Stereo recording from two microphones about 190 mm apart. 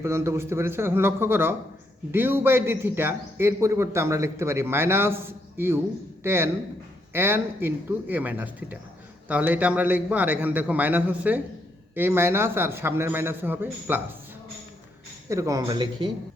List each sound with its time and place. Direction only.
0.0 s a man's voice: 15° right (ahead or behind)
15.3 s speech: 15° right (ahead or behind)